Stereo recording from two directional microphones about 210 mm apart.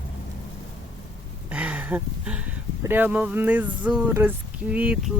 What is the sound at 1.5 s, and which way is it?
Speech, 5° right (ahead or behind).